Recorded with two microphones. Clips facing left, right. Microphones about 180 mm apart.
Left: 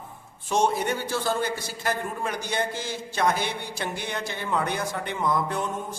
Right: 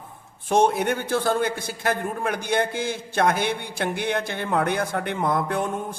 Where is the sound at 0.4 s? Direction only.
55° right (ahead or behind).